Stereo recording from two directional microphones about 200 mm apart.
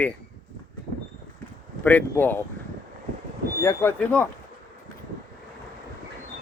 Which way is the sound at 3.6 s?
15° left (ahead or behind).